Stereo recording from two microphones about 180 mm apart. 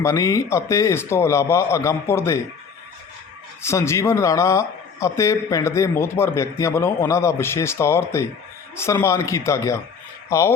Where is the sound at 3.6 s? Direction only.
15° left (ahead or behind).